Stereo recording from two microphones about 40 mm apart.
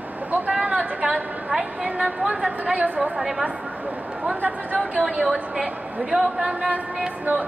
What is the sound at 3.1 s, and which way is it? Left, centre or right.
Speech, centre.